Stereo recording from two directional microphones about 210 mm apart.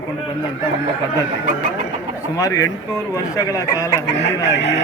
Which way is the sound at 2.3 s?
15° left (ahead or behind).